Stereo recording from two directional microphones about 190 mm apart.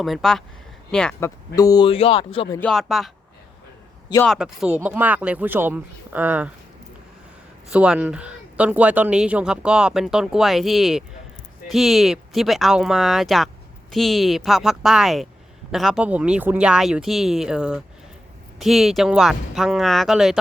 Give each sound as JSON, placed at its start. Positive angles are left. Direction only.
{"t": 0.0, "sound": "speech", "side_deg": 0}
{"t": 1.2, "sound": "speech", "side_deg": 20}
{"t": 2.6, "sound": "speech", "side_deg": 0}
{"t": 4.3, "sound": "speech", "side_deg": -5}
{"t": 7.7, "sound": "speech", "side_deg": -5}